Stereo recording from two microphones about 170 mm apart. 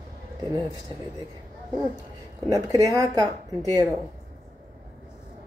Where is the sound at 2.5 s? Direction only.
20° right (ahead or behind).